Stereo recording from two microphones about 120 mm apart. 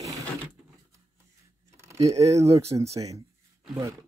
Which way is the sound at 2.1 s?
25° right (ahead or behind).